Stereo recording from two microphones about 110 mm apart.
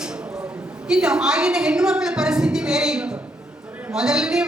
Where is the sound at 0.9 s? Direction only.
10° right (ahead or behind).